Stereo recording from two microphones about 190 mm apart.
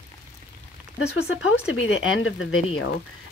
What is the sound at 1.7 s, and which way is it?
Speech, 80° left.